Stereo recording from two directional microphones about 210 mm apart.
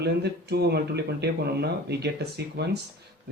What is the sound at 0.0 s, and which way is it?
Speech, 50° right (ahead or behind).